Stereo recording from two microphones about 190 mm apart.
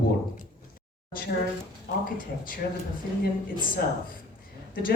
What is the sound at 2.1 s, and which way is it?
Speech, 45° left (ahead or behind).